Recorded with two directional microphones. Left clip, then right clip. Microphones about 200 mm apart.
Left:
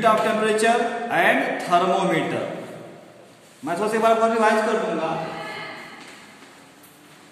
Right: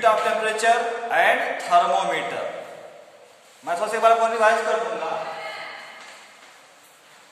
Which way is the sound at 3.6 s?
10° right (ahead or behind).